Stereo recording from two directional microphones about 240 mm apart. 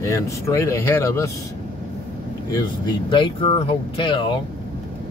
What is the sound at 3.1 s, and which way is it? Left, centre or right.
Speech, left.